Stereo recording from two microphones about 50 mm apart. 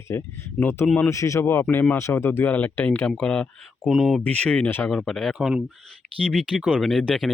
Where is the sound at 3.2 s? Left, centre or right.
Centre.